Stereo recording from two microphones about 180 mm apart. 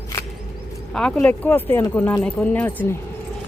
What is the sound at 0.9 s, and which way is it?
Speech, 5° left (ahead or behind).